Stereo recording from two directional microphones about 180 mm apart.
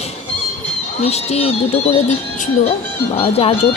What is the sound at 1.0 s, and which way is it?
Speech, 35° left (ahead or behind).